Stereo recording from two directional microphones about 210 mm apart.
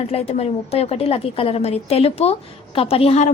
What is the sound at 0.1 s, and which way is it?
A woman's voice, 30° left (ahead or behind).